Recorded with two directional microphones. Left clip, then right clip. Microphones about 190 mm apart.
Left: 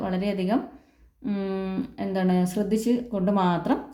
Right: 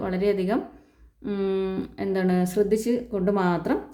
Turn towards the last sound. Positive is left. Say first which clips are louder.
# even
turn(degrees=-25)  # may be behind; listen again after turning